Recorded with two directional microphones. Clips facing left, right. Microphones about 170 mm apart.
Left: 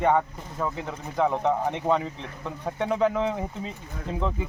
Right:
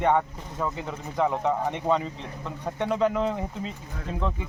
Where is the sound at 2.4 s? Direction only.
5° left (ahead or behind).